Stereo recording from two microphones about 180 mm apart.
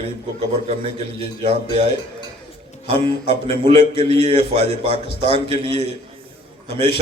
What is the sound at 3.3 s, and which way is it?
A man's voice, 30° right (ahead or behind).